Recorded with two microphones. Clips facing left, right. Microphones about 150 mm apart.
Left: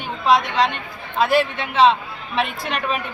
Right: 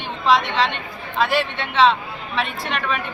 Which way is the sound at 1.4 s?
45° left (ahead or behind).